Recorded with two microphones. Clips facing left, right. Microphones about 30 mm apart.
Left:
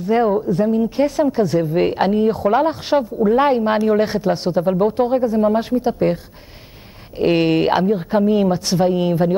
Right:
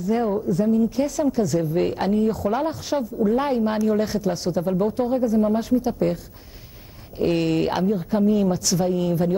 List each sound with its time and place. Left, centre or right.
0.0 s speech: left
7.2 s speech: left